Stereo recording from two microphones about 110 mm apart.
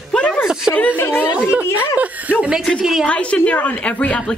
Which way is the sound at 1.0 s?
20° left (ahead or behind).